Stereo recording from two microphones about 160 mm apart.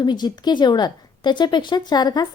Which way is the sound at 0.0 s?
25° left (ahead or behind).